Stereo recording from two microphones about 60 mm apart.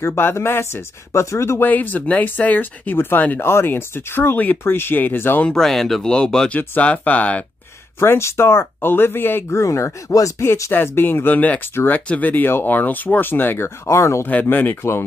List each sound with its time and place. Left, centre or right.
0.0 s speech: left
1.6 s speech: left
5.5 s speech: centre
6.8 s speech: left
8.0 s speech: left
9.6 s speech: left
10.7 s speech: left
13.8 s speech: left
14.2 s speech: left